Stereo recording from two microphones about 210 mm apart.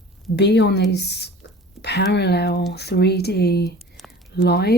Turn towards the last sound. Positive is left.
turn(degrees=50)  # may be behind; listen again after turning